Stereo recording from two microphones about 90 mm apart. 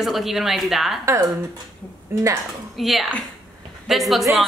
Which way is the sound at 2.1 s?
30° right (ahead or behind).